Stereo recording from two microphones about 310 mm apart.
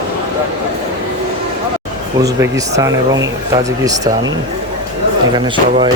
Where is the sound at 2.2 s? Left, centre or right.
Centre.